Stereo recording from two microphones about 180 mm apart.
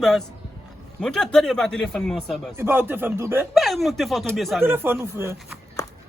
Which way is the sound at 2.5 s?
10° right (ahead or behind).